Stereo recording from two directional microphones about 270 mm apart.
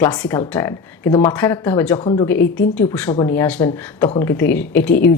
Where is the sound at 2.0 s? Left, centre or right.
Centre.